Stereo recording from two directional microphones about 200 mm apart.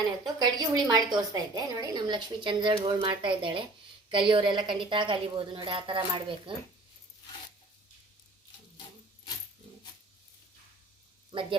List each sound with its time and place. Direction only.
0.3 s a woman's voice: 20° right (ahead or behind)